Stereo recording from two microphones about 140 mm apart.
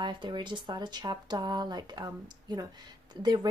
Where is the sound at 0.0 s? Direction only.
35° right (ahead or behind).